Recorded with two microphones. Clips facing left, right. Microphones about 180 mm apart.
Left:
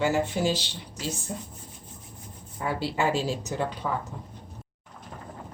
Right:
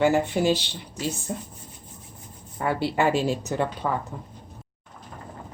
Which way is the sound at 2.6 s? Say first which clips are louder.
Right 4 dB; 60° right (ahead or behind).